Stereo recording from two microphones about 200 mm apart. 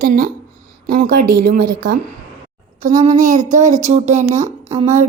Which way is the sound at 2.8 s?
35° right (ahead or behind).